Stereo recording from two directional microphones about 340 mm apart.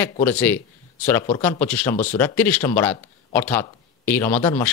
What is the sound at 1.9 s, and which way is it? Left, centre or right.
Speech, centre.